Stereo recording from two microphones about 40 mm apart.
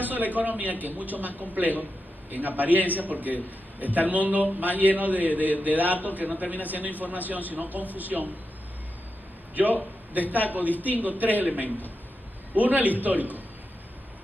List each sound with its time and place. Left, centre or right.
0.0 s a man's voice: right
10.1 s a man's voice: right